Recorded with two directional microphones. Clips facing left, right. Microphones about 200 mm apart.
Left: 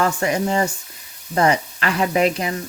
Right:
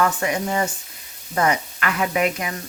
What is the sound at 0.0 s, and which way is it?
Speech, 30° left (ahead or behind).